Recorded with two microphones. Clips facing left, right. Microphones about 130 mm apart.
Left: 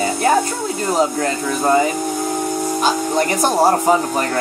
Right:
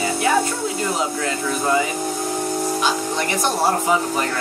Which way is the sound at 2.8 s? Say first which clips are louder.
Left 5 dB; 40° left (ahead or behind).